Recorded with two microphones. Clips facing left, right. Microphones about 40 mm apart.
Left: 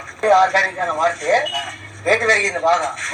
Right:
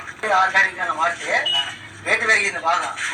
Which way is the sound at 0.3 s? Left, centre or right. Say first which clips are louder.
Right 1 dB; right.